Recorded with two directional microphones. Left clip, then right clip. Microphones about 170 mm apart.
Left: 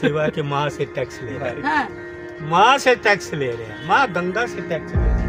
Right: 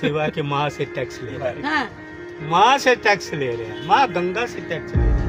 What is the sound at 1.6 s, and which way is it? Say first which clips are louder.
Speech: left 3 dB; 55° right (ahead or behind).